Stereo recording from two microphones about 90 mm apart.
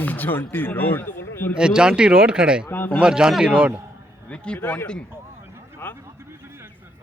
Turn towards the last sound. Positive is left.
turn(degrees=25)  # may be behind; listen again after turning